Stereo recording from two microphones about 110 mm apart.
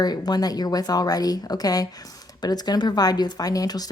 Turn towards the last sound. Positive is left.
turn(degrees=35)  # may be behind; listen again after turning